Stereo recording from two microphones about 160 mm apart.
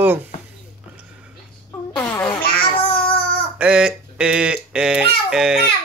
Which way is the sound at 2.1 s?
10° left (ahead or behind).